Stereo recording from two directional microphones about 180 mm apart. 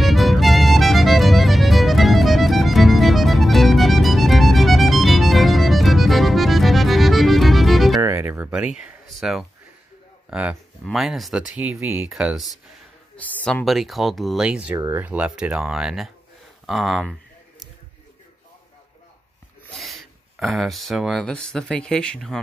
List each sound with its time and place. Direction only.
0.0 s music: centre (ahead or behind)
8.0 s music: 15° right (ahead or behind)
8.7 s a sound: centre (ahead or behind)
10.3 s speech: 5° right (ahead or behind)
16.6 s a sound: centre (ahead or behind)
19.7 s speech: centre (ahead or behind)